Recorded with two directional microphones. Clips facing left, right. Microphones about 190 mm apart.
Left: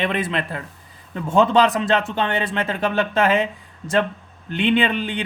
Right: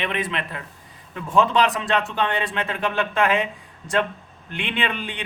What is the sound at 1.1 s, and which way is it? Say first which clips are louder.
Speech: left 3 dB; 25° left (ahead or behind).